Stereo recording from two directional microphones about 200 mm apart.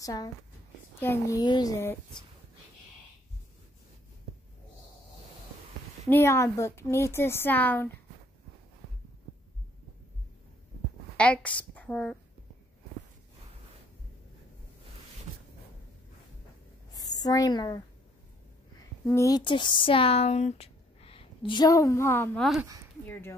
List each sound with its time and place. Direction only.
0.0 s a woman's voice: 20° left (ahead or behind)
6.0 s a woman's voice: 10° left (ahead or behind)
11.1 s a woman's voice: 5° left (ahead or behind)
16.9 s a woman's voice: 20° left (ahead or behind)
19.0 s a woman's voice: 15° left (ahead or behind)